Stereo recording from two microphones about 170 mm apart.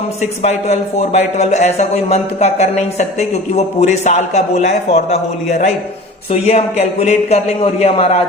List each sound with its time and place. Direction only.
0.2 s speech: 40° left (ahead or behind)